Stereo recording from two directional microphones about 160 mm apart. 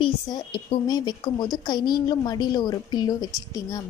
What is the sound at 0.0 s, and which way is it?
A woman's voice, 30° left (ahead or behind).